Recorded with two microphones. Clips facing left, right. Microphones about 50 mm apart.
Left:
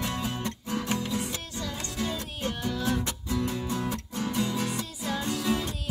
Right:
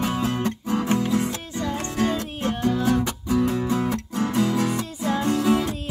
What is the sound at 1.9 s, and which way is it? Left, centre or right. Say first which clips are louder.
Music: right 9 dB; right.